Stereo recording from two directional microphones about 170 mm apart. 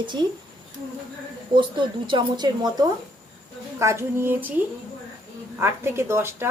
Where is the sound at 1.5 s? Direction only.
30° right (ahead or behind); by 4.5 s 10° right (ahead or behind).